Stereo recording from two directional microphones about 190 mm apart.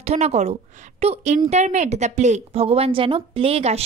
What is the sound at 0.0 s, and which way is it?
A woman's voice, 35° right (ahead or behind).